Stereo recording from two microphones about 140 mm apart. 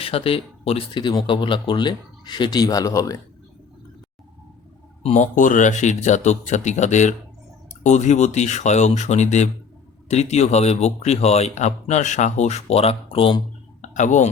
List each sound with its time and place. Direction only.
0.0 s speech: 40° left (ahead or behind); by 3.2 s 25° left (ahead or behind)
5.0 s a man's voice: 60° left (ahead or behind); by 13.4 s 40° left (ahead or behind)
13.8 s speech: 60° left (ahead or behind)